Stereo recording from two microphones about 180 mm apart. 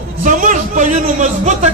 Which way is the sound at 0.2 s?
45° right (ahead or behind).